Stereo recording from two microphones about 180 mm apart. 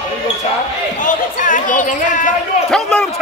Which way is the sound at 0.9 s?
45° left (ahead or behind).